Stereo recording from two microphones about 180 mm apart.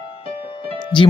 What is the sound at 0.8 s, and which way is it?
Music, 25° left (ahead or behind).